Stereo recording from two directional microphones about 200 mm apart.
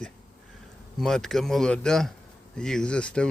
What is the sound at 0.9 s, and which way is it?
Speech, centre (ahead or behind).